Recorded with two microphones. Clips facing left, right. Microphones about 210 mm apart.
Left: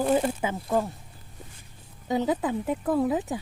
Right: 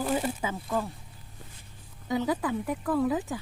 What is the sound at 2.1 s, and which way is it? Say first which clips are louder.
Speech: left 2 dB; 20° left (ahead or behind).